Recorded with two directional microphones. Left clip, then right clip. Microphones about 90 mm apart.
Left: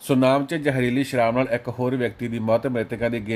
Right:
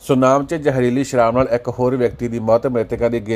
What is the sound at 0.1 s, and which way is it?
Speech, 30° right (ahead or behind).